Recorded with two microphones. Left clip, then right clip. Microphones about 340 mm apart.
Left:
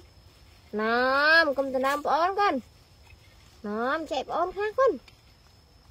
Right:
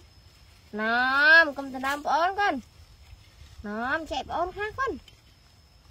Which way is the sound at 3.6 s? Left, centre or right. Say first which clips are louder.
Left 1 dB; right.